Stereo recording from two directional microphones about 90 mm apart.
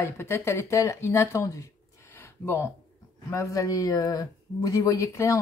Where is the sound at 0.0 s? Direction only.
25° left (ahead or behind).